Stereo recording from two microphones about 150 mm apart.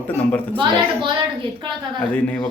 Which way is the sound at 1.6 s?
30° right (ahead or behind).